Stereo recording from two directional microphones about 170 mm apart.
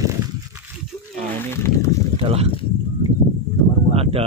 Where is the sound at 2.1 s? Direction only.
35° right (ahead or behind).